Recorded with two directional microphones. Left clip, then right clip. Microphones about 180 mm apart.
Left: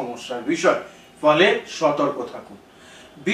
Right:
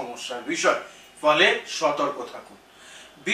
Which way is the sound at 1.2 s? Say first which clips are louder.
Left 3 dB; 10° left (ahead or behind).